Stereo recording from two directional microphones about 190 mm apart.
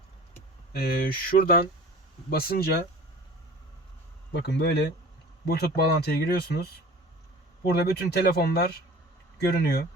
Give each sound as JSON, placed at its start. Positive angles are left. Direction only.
{"t": 0.7, "sound": "speech", "side_deg": 55}
{"t": 1.3, "sound": "speech", "side_deg": 35}
{"t": 2.3, "sound": "speech", "side_deg": 55}
{"t": 4.3, "sound": "speech", "side_deg": 65}